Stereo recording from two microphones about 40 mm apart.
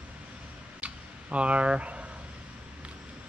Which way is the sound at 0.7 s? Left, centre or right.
Right.